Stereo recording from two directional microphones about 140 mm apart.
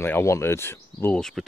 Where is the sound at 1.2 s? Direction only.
5° left (ahead or behind).